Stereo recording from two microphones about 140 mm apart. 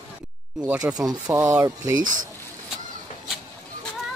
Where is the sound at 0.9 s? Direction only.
25° right (ahead or behind).